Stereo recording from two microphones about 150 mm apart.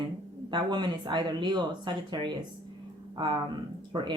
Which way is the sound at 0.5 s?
30° right (ahead or behind).